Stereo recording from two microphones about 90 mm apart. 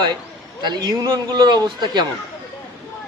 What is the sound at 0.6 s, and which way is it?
Speech, 50° right (ahead or behind).